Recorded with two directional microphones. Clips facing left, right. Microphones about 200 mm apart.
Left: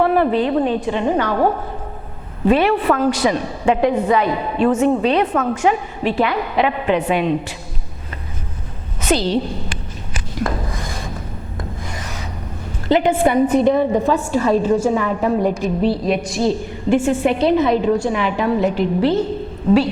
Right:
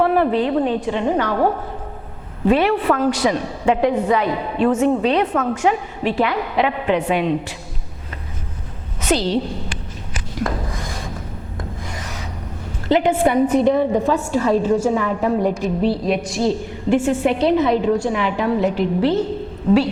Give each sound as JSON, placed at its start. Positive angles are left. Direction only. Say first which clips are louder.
{"t": 0.0, "sound": "a woman's voice", "louder": "left 1 dB", "side_deg": 15}
{"t": 2.5, "sound": "a woman's voice", "louder": "left 1 dB", "side_deg": 15}
{"t": 9.0, "sound": "a woman's voice", "louder": "left 1 dB", "side_deg": 10}
{"t": 10.2, "sound": "a sound", "louder": "left 1 dB", "side_deg": 25}
{"t": 11.9, "sound": "rub", "louder": "left 1 dB", "side_deg": 20}
{"t": 12.9, "sound": "a woman's voice", "louder": "left 1 dB", "side_deg": 10}